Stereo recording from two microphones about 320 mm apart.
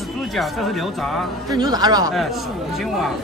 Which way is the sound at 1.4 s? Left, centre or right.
Centre.